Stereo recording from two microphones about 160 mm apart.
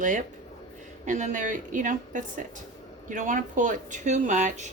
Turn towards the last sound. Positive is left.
turn(degrees=-50)  # may be behind; listen again after turning